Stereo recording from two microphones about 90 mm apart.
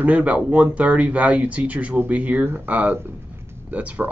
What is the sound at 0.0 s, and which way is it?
Speech, 15° right (ahead or behind).